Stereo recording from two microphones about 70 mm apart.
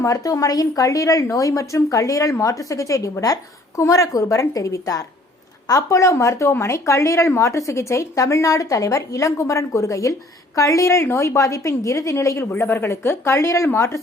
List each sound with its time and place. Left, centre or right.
0.0 s speech: left